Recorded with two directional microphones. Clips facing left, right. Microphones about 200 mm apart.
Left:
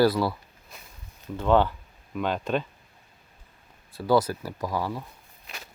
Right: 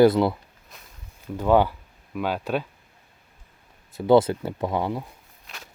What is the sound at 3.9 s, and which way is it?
Speech, 25° right (ahead or behind).